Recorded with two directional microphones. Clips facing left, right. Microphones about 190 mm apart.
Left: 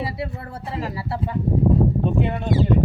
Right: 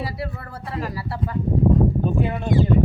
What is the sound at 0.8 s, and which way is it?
Speech, 25° left (ahead or behind).